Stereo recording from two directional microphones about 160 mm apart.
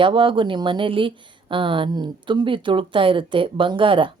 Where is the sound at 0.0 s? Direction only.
30° right (ahead or behind).